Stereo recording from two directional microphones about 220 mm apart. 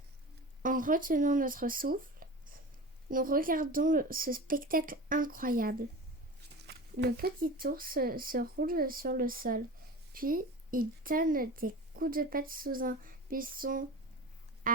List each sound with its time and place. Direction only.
0.6 s speech: 35° right (ahead or behind)